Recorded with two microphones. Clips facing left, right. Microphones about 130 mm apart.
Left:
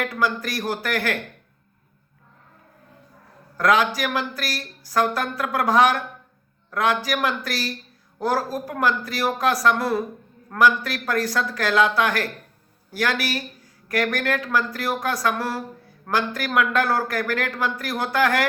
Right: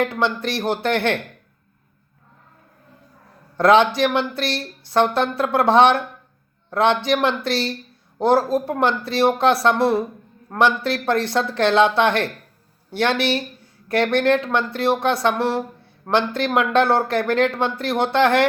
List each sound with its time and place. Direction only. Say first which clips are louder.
0.0 s speech: right 3 dB; 25° right (ahead or behind)
3.6 s speech: right 5 dB; 25° right (ahead or behind)